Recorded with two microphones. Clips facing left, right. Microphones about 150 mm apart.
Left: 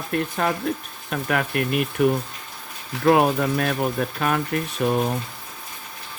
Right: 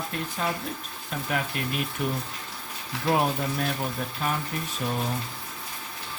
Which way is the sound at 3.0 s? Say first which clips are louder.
Left 7 dB; 70° left (ahead or behind).